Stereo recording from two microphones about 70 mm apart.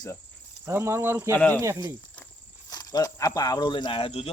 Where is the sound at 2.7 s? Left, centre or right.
Left.